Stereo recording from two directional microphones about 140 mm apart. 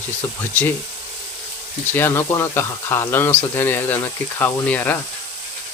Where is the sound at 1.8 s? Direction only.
15° left (ahead or behind).